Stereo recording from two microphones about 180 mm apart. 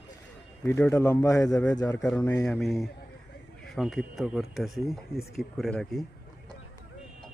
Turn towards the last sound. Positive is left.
turn(degrees=0)  # may be behind; listen again after turning